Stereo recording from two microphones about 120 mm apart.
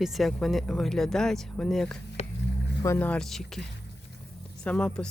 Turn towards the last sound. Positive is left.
turn(degrees=5)  # may be behind; listen again after turning